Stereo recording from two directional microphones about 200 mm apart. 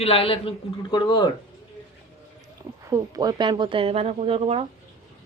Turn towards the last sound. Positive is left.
turn(degrees=-30)  # may be behind; listen again after turning